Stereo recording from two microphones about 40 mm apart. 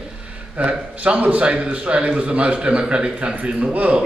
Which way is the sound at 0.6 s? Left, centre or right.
Right.